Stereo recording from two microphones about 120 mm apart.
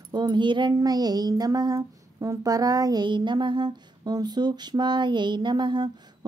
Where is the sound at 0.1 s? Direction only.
40° right (ahead or behind).